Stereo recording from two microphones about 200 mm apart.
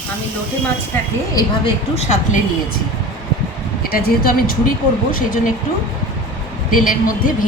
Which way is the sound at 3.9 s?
50° left (ahead or behind).